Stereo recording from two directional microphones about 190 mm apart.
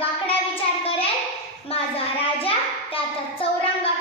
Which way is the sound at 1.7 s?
30° left (ahead or behind).